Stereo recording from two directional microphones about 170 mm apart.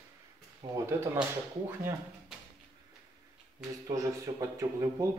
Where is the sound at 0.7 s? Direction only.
15° right (ahead or behind).